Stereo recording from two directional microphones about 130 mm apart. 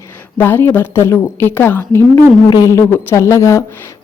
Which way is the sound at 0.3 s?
15° left (ahead or behind).